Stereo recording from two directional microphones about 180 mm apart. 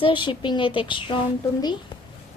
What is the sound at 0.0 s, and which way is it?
Speech, 25° left (ahead or behind).